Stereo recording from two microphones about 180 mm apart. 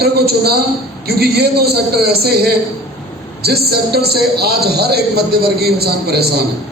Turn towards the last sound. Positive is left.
turn(degrees=-60)  # may be behind; listen again after turning